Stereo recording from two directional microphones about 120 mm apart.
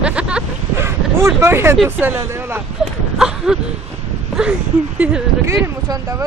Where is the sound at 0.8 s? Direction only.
20° right (ahead or behind).